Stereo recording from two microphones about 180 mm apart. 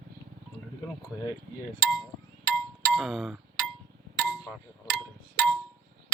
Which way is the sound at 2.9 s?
Centre (ahead or behind).